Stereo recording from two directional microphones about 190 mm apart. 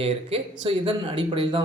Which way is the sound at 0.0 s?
30° right (ahead or behind).